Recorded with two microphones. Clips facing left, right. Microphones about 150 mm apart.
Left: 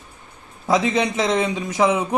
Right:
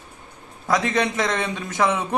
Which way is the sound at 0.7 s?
20° left (ahead or behind).